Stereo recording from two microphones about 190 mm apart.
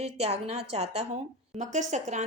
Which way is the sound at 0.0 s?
35° right (ahead or behind).